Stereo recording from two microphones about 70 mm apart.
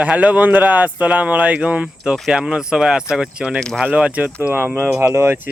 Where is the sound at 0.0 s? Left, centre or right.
Right.